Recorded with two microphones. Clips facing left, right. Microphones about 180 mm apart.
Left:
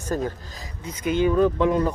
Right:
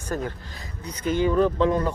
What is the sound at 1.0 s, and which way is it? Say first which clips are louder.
Speech: left 1 dB; 15° left (ahead or behind).